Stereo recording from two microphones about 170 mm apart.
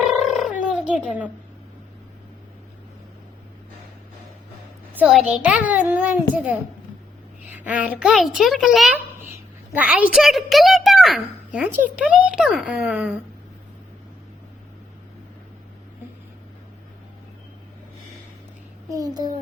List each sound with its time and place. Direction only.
0.1 s a sound: centre (ahead or behind)
4.9 s a child's voice: 5° right (ahead or behind)
7.6 s a woman's voice: 10° right (ahead or behind)
18.9 s a child's voice: 20° right (ahead or behind)